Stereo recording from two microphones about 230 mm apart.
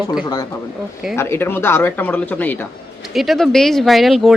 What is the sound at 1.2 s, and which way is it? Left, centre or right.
Speech, centre.